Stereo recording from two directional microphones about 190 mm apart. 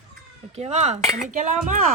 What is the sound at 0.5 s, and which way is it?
A woman's voice, 35° right (ahead or behind).